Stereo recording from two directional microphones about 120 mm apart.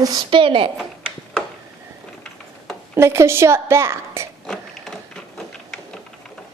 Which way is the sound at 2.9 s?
20° right (ahead or behind).